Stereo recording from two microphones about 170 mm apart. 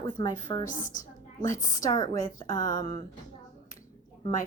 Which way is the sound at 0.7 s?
50° left (ahead or behind).